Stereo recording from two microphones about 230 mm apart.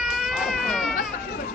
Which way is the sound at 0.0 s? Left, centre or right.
Centre.